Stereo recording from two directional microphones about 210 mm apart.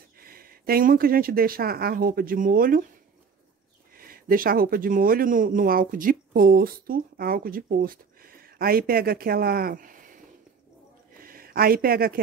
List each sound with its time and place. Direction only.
0.2 s speech: 45° right (ahead or behind)
3.9 s speech: 45° right (ahead or behind)